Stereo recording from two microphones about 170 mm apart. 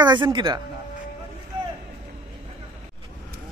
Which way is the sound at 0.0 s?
25° right (ahead or behind).